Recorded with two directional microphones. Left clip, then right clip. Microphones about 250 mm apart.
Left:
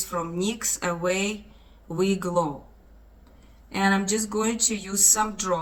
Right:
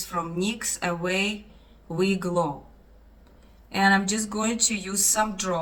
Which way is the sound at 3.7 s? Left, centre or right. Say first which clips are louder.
Right 2 dB; centre.